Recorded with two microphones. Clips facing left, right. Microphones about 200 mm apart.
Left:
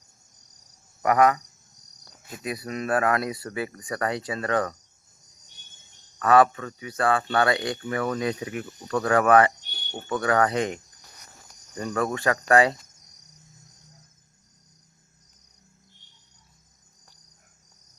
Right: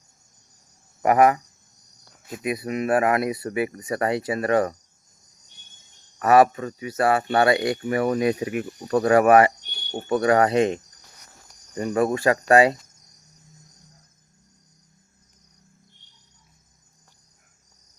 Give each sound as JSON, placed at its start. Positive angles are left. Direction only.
{"t": 1.0, "sound": "speech", "side_deg": -25}
{"t": 2.4, "sound": "speech", "side_deg": -20}
{"t": 6.1, "sound": "speech", "side_deg": -20}
{"t": 11.9, "sound": "speech", "side_deg": -25}